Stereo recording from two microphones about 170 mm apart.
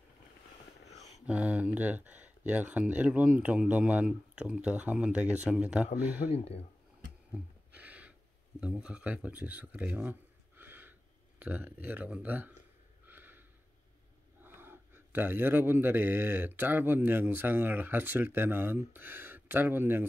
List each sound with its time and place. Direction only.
1.0 s speech: 5° right (ahead or behind)
6.3 s speech: 35° left (ahead or behind)
7.3 s a sound: 10° right (ahead or behind)
8.5 s speech: 5° right (ahead or behind)
13.0 s snort: 10° right (ahead or behind)
14.4 s speech: 10° right (ahead or behind)